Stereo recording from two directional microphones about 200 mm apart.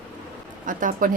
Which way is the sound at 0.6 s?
40° right (ahead or behind).